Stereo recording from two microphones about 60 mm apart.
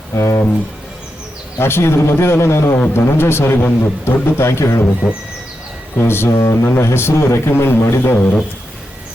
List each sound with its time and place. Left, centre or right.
0.1 s speech: left
1.5 s speech: left
6.0 s speech: left